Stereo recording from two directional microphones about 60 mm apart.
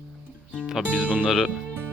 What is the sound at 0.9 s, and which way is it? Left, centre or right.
Speech, centre.